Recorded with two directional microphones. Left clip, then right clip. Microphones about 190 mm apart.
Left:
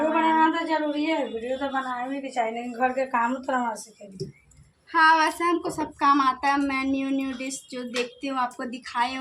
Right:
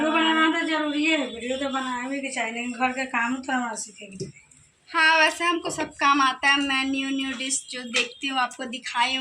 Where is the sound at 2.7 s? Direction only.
45° left (ahead or behind).